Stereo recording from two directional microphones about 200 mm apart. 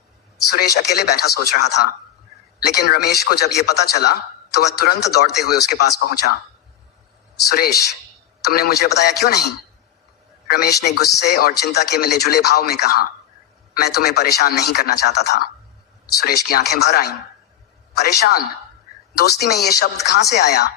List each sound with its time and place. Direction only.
0.5 s a man's voice: 55° left (ahead or behind)
7.4 s a man's voice: 50° left (ahead or behind)
10.5 s a man's voice: 55° left (ahead or behind)